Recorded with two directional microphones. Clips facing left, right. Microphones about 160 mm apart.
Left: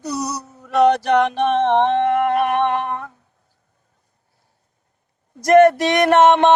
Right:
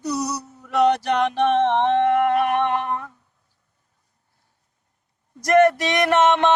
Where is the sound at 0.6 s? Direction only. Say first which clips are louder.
Left 3 dB; 60° left (ahead or behind).